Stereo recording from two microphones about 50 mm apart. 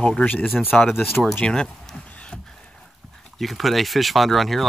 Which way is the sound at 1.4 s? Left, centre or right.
Centre.